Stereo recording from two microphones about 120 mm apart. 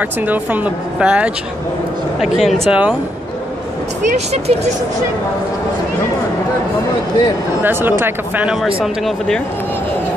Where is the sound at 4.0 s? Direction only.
60° right (ahead or behind).